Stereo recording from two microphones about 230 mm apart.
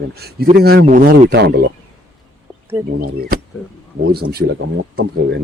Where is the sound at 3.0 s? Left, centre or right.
Right.